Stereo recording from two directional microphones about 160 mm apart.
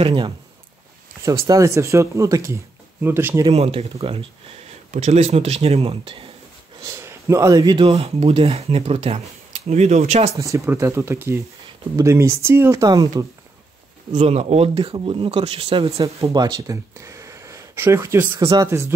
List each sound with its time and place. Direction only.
0.0 s speech: 30° right (ahead or behind)
1.5 s speech: 20° right (ahead or behind)
3.5 s speech: 40° right (ahead or behind)
7.0 s speech: 20° right (ahead or behind); by 10.3 s 45° right (ahead or behind)
10.4 s speech: 20° right (ahead or behind)
14.1 s speech: 40° right (ahead or behind)
16.3 s speech: 25° right (ahead or behind)